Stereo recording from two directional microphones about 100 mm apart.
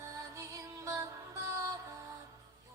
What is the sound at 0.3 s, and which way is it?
Music, 30° right (ahead or behind).